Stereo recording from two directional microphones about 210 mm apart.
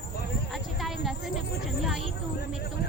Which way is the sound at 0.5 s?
Centre (ahead or behind).